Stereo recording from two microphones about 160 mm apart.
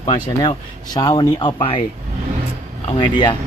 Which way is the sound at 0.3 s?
25° left (ahead or behind).